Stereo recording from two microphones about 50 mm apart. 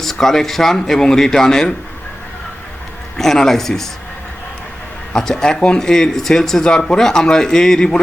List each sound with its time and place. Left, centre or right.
0.0 s speech: centre
3.2 s speech: centre
5.1 s speech: centre